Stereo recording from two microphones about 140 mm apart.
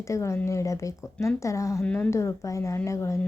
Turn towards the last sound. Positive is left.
turn(degrees=20)  # may be behind; listen again after turning